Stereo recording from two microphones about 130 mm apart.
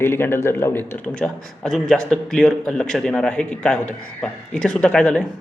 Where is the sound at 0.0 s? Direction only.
20° left (ahead or behind).